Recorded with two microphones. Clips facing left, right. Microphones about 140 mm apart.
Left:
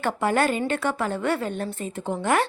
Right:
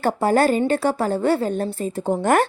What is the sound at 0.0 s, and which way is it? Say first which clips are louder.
A woman's voice: right 5 dB; 35° right (ahead or behind).